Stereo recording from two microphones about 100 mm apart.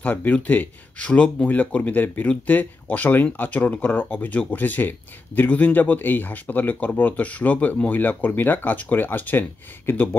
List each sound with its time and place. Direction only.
0.0 s speech: 15° left (ahead or behind)